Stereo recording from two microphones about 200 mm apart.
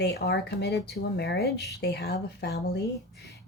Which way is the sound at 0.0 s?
55° left (ahead or behind).